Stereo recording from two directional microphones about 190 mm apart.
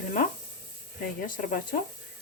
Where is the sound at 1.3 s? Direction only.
45° left (ahead or behind).